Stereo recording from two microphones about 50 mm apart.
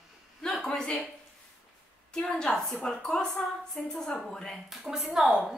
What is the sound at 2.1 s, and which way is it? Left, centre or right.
Speech, centre.